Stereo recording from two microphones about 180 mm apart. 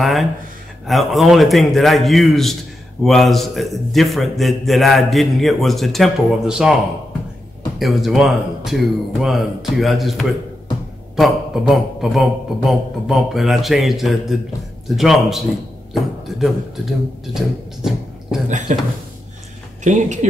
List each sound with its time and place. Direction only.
0.0 s a man's voice: centre (ahead or behind)
7.8 s a man's voice: centre (ahead or behind)
18.7 s speech: 45° right (ahead or behind)